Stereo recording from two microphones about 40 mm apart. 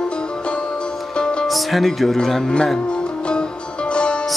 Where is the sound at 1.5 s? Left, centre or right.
Centre.